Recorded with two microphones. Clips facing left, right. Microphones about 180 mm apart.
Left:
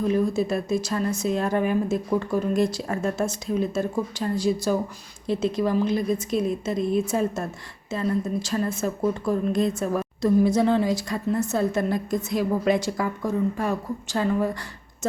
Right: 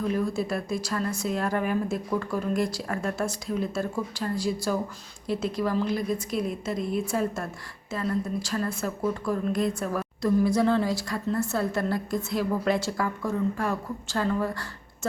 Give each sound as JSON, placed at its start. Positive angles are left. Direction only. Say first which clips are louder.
{"t": 0.0, "sound": "a woman's voice", "louder": "left 4 dB", "side_deg": 20}